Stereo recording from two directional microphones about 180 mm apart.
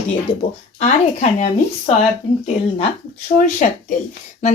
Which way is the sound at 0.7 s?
40° left (ahead or behind).